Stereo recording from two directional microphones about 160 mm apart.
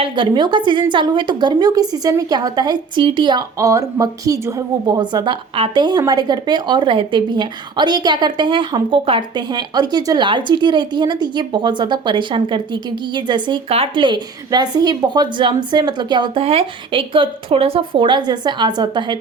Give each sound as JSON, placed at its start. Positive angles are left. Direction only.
{"t": 0.0, "sound": "a woman's voice", "side_deg": -30}